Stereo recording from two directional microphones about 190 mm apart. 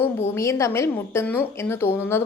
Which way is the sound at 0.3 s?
15° left (ahead or behind).